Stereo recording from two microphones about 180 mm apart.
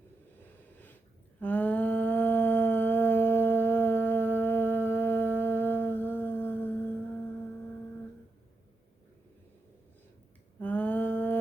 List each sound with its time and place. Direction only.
1.4 s humming: 10° left (ahead or behind)
10.6 s mantra: 10° left (ahead or behind)